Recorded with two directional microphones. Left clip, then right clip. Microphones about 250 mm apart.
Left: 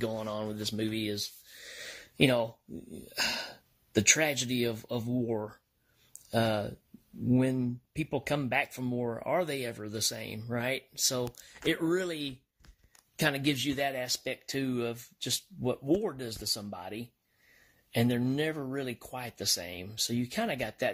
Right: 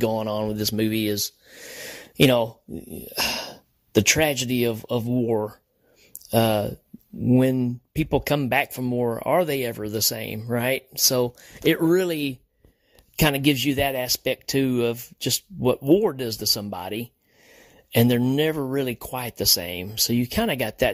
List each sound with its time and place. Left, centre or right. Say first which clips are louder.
0.0 s speech: right 10 dB; right